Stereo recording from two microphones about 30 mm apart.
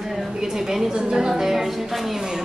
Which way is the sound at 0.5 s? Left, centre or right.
Centre.